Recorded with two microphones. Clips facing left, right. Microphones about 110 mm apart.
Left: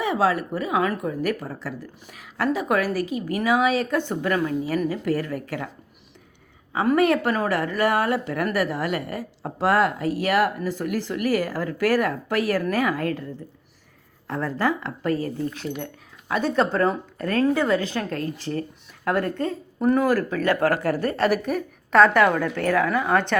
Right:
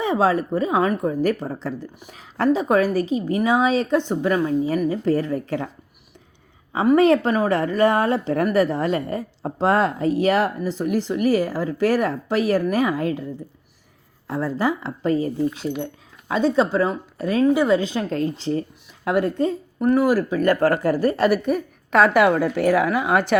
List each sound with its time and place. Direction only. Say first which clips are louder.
0.0 s a woman's voice: right 3 dB; 30° right (ahead or behind)
6.9 s a woman's voice: right 4 dB; 25° right (ahead or behind)
14.3 s a woman's voice: right 2 dB; 10° right (ahead or behind)
19.8 s speech: right 2 dB; 5° right (ahead or behind)
20.1 s a woman's voice: right 2 dB; 15° right (ahead or behind)
20.5 s a woman's voice: right 3 dB; centre (ahead or behind)